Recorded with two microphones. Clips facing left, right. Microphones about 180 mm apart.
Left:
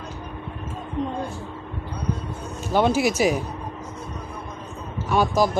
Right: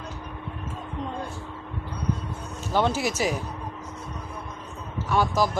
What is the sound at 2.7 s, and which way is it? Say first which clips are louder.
Speech: left 5 dB; 15° left (ahead or behind).